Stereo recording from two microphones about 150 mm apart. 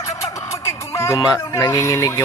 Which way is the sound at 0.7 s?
20° left (ahead or behind).